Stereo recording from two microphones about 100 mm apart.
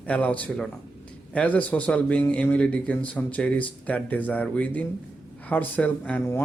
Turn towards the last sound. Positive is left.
turn(degrees=15)  # may be behind; listen again after turning